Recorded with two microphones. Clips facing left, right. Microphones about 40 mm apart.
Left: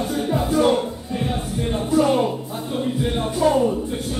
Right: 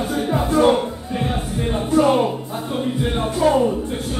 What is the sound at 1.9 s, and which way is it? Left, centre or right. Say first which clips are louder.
Speech: right 2 dB; centre.